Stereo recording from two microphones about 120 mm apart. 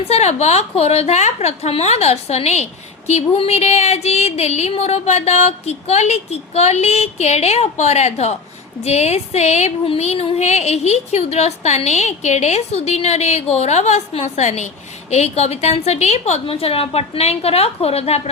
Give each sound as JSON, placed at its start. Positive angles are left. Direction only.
{"t": 0.0, "sound": "speech", "side_deg": 65}
{"t": 16.5, "sound": "speech", "side_deg": 55}